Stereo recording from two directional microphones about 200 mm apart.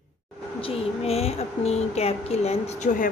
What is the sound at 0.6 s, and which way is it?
A woman's voice, 30° left (ahead or behind).